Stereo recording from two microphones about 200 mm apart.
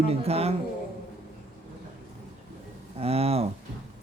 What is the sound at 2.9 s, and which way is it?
Speech, 30° right (ahead or behind).